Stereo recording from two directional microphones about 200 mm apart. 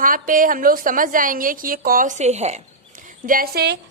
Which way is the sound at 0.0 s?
45° right (ahead or behind).